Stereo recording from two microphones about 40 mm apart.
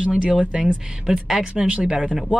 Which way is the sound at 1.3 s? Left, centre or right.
Right.